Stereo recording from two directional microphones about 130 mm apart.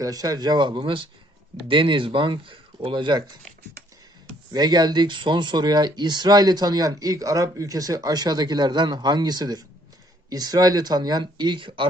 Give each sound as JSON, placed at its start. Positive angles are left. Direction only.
{"t": 0.0, "sound": "speech", "side_deg": -30}
{"t": 4.5, "sound": "speech", "side_deg": -30}